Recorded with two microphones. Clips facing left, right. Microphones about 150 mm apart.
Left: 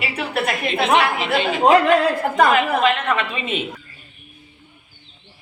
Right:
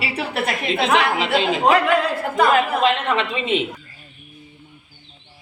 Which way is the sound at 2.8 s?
25° right (ahead or behind).